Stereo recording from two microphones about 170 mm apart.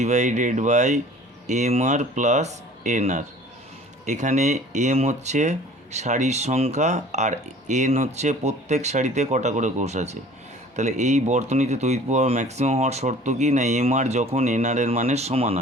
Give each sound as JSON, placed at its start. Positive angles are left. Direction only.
{"t": 0.0, "sound": "speech", "side_deg": -45}